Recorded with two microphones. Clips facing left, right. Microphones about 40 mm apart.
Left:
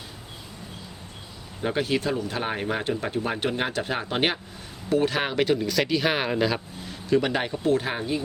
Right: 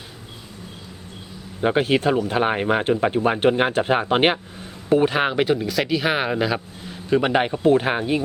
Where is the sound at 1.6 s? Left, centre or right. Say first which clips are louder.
Right 6 dB; right; by 6.6 s centre.